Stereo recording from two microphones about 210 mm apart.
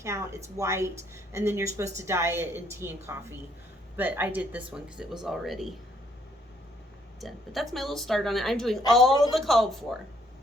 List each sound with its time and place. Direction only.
0.0 s speech: 15° right (ahead or behind)
7.2 s speech: centre (ahead or behind)